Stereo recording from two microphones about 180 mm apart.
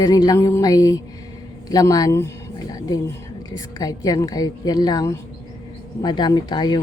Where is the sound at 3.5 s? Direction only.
20° left (ahead or behind).